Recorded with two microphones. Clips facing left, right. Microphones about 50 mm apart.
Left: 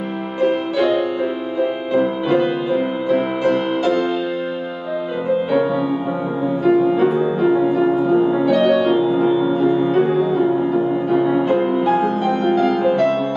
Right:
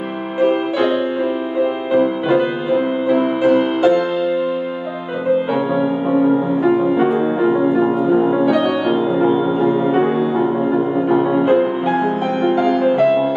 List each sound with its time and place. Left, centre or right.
0.4 s music: right
5.5 s music: centre